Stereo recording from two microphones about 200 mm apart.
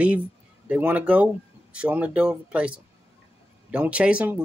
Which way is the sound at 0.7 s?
10° right (ahead or behind).